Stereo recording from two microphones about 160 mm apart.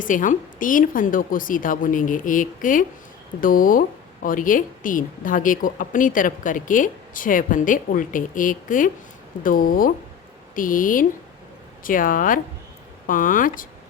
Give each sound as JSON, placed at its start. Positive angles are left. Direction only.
{"t": 0.0, "sound": "a woman's voice", "side_deg": 55}